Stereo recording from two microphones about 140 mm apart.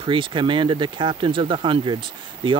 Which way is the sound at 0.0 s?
35° right (ahead or behind).